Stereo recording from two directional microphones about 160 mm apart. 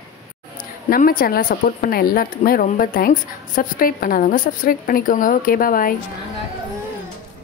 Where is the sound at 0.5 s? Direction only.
65° left (ahead or behind).